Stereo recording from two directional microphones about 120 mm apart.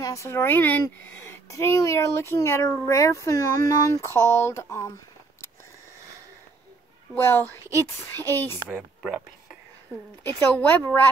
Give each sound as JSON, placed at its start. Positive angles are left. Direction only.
{"t": 0.0, "sound": "speech", "side_deg": 25}
{"t": 7.2, "sound": "a woman's voice", "side_deg": 20}
{"t": 10.2, "sound": "a woman's voice", "side_deg": 15}